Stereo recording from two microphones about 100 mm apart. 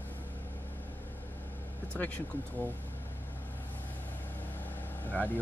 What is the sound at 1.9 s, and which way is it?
Speech, 15° left (ahead or behind).